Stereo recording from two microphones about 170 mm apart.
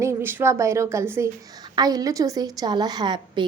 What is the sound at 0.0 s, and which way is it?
A woman's voice, 15° right (ahead or behind).